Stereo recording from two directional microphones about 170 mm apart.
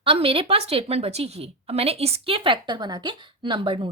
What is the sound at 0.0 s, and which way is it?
A woman's voice, 30° right (ahead or behind).